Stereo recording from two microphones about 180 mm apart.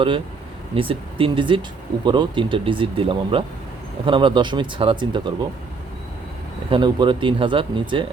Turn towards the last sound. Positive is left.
turn(degrees=-30)  # may be behind; listen again after turning